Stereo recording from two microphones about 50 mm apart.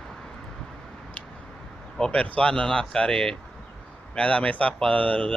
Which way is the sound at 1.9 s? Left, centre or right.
Centre.